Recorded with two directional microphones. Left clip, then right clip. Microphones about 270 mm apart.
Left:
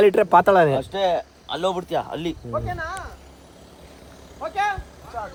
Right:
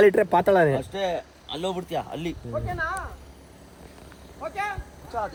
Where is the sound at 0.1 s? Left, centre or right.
Centre.